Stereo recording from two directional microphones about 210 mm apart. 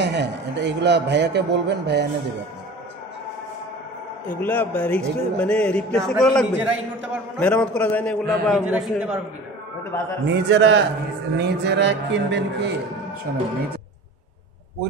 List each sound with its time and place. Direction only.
0.0 s a man's voice: 55° right (ahead or behind)
4.4 s a man's voice: 10° left (ahead or behind)
10.2 s a man's voice: 55° right (ahead or behind)